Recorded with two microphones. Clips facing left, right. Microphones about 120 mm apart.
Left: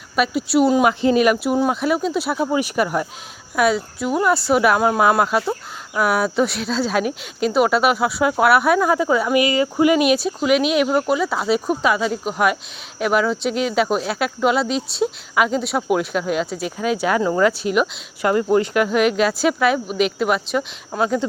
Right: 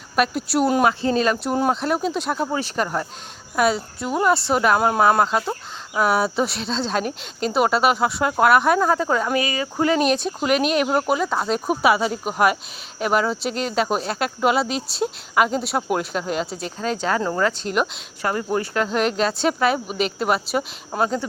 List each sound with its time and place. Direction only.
0.2 s speech: centre (ahead or behind)
0.9 s speech: 15° left (ahead or behind)
1.8 s speech: centre (ahead or behind)
9.3 s speech: 20° left (ahead or behind); by 11.6 s 5° left (ahead or behind)
11.6 s speech: 5° right (ahead or behind); by 18.3 s 10° left (ahead or behind)
18.3 s speech: 20° left (ahead or behind)
18.9 s speech: 5° left (ahead or behind)